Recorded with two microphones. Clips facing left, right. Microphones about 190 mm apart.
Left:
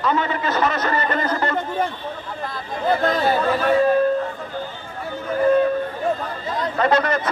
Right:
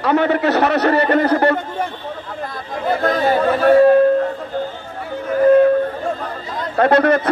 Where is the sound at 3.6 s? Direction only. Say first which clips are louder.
Right 9 dB; 55° right (ahead or behind).